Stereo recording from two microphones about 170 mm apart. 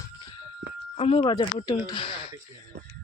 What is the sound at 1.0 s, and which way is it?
Speech, 30° left (ahead or behind).